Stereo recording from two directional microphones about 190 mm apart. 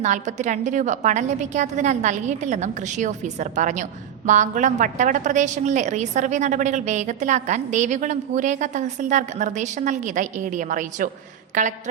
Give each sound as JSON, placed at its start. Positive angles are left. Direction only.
{"t": 0.0, "sound": "a woman's voice", "side_deg": -40}